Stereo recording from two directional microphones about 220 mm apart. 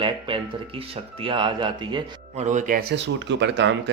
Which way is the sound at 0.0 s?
25° right (ahead or behind).